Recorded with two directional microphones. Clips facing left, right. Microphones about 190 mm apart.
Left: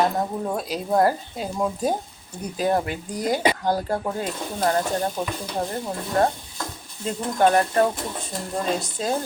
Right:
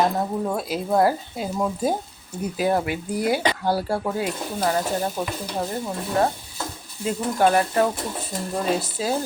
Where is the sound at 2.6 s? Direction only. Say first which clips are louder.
Even; 10° right (ahead or behind).